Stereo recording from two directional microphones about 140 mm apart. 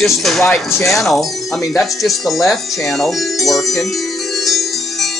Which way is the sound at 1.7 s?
Centre (ahead or behind).